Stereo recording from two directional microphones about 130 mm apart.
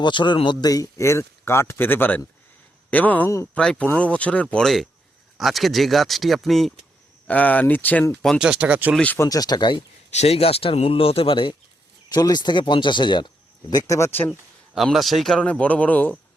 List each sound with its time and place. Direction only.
0.0 s a man's voice: 35° left (ahead or behind); by 3.5 s 20° left (ahead or behind)
3.5 s a man's voice: 5° left (ahead or behind)
7.3 s a man's voice: 10° left (ahead or behind)
8.2 s speech: centre (ahead or behind)
9.0 s speech: 15° left (ahead or behind); by 9.8 s 35° left (ahead or behind)
10.1 s a man's voice: 55° left (ahead or behind)
12.0 s speech: 30° left (ahead or behind)
14.8 s a man's voice: centre (ahead or behind)